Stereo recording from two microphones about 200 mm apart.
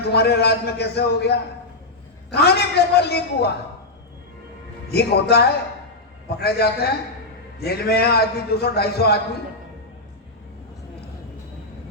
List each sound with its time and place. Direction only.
0.0 s a man's voice: 55° left (ahead or behind)
4.9 s a man's voice: 55° left (ahead or behind)